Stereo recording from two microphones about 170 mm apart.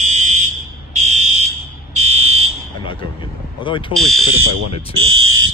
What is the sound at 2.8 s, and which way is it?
Speech, 30° left (ahead or behind).